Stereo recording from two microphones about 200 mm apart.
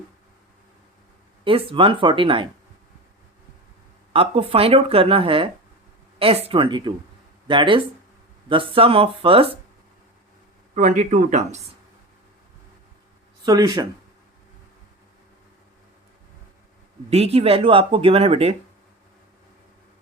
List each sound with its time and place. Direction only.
1.5 s speech: 25° right (ahead or behind)
4.1 s speech: 25° right (ahead or behind)
10.8 s speech: 40° right (ahead or behind)
13.4 s speech: 20° right (ahead or behind)
17.1 s speech: 30° right (ahead or behind)